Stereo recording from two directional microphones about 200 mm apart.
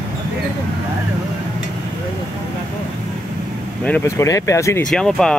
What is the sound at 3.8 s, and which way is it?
Speech, 10° left (ahead or behind).